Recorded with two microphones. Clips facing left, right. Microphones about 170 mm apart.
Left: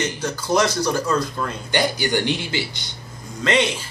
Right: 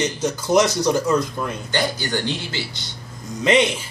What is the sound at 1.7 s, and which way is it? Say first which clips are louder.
A man's voice: left 3 dB; 15° left (ahead or behind).